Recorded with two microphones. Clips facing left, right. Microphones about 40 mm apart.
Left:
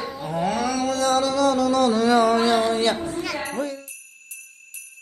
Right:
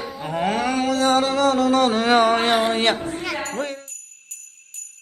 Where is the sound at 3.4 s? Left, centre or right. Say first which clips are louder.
Right 1 dB; right.